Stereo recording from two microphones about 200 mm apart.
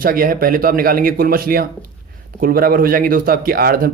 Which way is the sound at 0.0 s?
45° right (ahead or behind).